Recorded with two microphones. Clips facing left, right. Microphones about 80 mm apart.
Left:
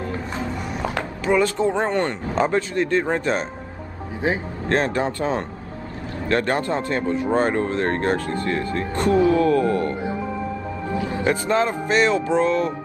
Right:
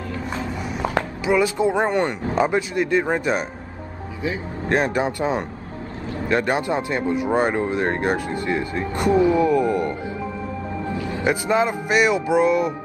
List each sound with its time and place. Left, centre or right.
1.2 s speech: centre
4.6 s speech: centre
11.0 s music: left
11.2 s speech: centre